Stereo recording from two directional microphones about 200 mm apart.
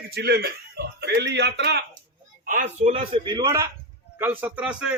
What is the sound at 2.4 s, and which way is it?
A man's voice, 40° right (ahead or behind).